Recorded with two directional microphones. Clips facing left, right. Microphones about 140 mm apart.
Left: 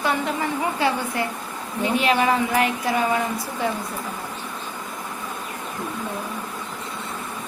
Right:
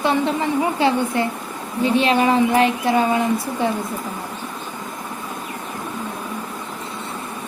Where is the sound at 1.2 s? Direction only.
30° right (ahead or behind).